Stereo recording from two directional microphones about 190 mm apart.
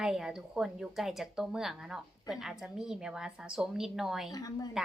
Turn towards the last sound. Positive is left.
turn(degrees=20)  # may be behind; listen again after turning